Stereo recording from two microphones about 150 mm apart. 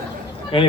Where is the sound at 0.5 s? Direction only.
35° left (ahead or behind).